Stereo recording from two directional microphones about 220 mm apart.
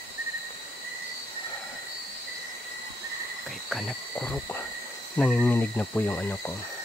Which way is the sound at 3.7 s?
Centre (ahead or behind).